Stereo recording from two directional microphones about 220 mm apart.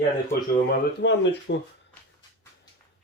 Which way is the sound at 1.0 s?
50° left (ahead or behind).